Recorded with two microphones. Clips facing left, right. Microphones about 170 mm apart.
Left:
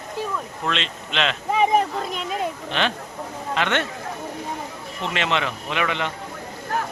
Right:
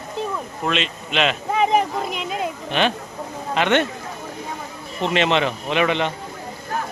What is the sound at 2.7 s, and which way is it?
Speech, 15° right (ahead or behind).